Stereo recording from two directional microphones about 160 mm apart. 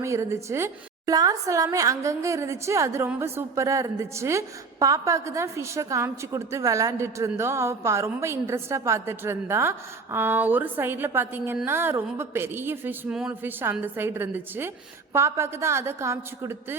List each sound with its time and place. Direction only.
0.0 s a woman's voice: 20° right (ahead or behind)